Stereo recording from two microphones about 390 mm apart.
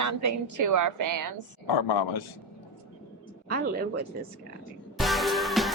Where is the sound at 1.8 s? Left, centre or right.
Left.